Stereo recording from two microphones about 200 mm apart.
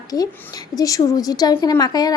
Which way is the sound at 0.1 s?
20° left (ahead or behind).